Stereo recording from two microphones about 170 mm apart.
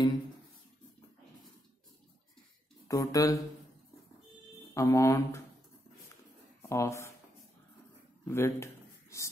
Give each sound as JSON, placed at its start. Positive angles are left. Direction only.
{"t": 2.9, "sound": "speech", "side_deg": 20}
{"t": 4.7, "sound": "speech", "side_deg": 20}
{"t": 6.6, "sound": "speech", "side_deg": 15}
{"t": 8.3, "sound": "speech", "side_deg": 15}